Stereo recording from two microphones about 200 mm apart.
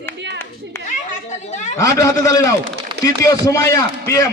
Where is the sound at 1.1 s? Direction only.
35° left (ahead or behind).